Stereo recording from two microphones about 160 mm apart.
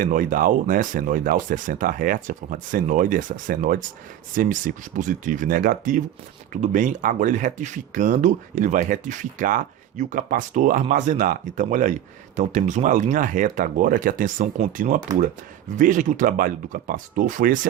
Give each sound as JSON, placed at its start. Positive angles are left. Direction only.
{"t": 0.0, "sound": "speech", "side_deg": -55}